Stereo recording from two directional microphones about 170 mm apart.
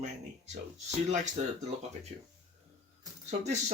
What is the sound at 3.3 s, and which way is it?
Speech, 40° right (ahead or behind).